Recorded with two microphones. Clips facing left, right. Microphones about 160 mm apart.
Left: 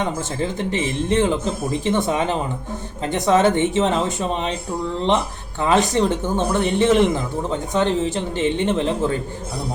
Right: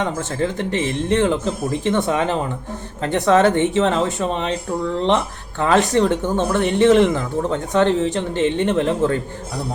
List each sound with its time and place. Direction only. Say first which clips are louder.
0.0 s a man's voice: right 2 dB; 15° left (ahead or behind)